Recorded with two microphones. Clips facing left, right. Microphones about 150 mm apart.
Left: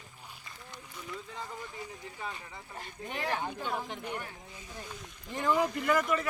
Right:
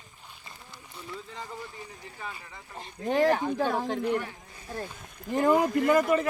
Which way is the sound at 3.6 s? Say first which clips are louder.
Right 9 dB; 90° right.